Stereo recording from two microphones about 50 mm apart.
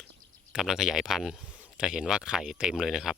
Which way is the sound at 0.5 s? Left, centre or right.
Centre.